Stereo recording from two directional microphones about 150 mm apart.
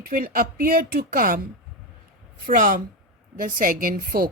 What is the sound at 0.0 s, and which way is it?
A woman's voice, 75° right (ahead or behind).